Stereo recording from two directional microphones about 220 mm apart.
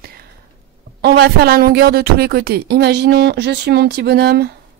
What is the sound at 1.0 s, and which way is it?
A woman's voice, 45° right (ahead or behind).